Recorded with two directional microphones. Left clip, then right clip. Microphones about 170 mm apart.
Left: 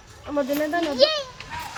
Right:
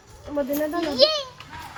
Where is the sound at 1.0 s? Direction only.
35° right (ahead or behind).